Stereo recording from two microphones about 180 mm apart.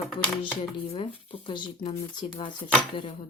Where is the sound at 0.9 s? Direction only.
30° left (ahead or behind).